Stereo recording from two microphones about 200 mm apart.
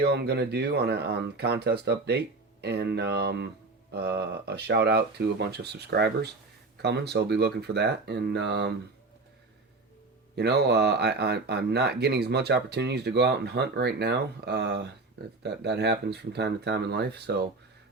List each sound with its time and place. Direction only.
0.0 s speech: 55° right (ahead or behind)
10.3 s speech: 55° right (ahead or behind)